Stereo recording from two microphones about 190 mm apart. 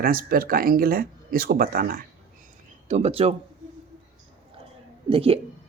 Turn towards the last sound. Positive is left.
turn(degrees=-30)  # may be behind; listen again after turning